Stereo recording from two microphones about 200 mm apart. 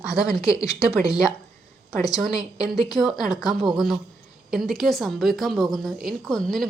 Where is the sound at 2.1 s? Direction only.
Centre (ahead or behind).